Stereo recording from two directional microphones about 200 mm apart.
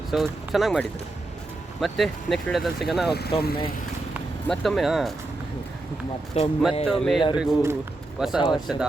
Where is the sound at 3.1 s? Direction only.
55° left (ahead or behind).